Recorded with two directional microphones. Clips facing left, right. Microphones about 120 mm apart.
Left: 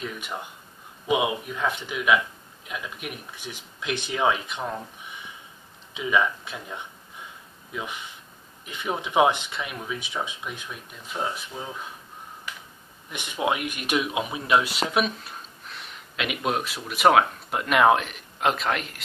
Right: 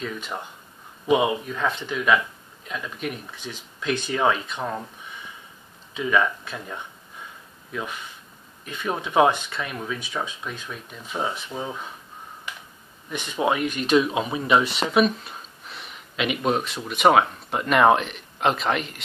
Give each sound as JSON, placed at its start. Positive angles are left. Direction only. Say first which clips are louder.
{"t": 1.0, "sound": "speech", "louder": "right 4 dB", "side_deg": 10}
{"t": 5.9, "sound": "speech", "louder": "right 2 dB", "side_deg": 15}
{"t": 11.5, "sound": "speech", "louder": "right 5 dB", "side_deg": -10}
{"t": 13.1, "sound": "speech", "louder": "right 3 dB", "side_deg": 15}